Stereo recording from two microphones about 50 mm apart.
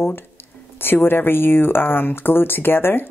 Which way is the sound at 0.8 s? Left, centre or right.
Left.